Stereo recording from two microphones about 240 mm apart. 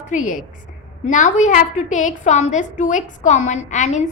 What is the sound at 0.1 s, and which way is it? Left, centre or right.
A woman's voice, left.